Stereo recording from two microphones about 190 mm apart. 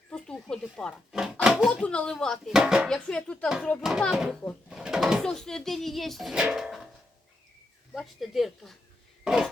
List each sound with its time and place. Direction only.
0.1 s speech: 5° left (ahead or behind)
7.9 s speech: centre (ahead or behind)
9.2 s a sound: 5° right (ahead or behind)